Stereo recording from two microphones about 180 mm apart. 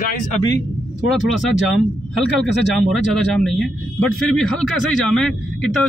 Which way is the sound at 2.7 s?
Centre (ahead or behind).